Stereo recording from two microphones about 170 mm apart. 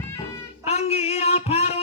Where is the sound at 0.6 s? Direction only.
35° left (ahead or behind).